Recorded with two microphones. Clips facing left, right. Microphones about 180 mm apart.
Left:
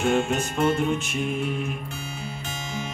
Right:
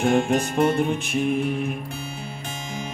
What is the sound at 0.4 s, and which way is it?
Music, 55° right (ahead or behind).